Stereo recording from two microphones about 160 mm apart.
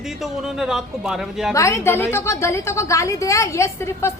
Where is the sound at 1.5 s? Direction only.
20° left (ahead or behind).